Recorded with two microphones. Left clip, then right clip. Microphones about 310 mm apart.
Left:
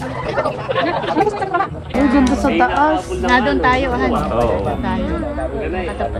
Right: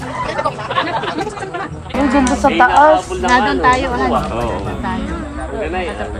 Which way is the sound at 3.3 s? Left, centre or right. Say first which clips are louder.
Right 2 dB; centre.